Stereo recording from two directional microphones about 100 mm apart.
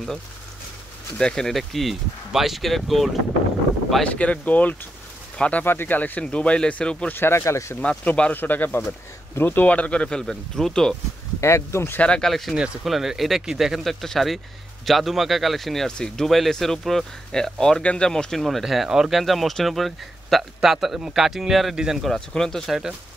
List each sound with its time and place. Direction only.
1.1 s speech: 5° left (ahead or behind)
4.1 s speech: 15° left (ahead or behind)
7.2 s speech: 25° left (ahead or behind)
7.8 s speech: 15° left (ahead or behind)
11.4 s speech: 30° left (ahead or behind)
12.0 s speech: 10° left (ahead or behind)